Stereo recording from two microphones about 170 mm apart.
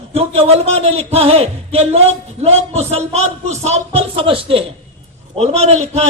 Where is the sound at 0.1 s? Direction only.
35° right (ahead or behind).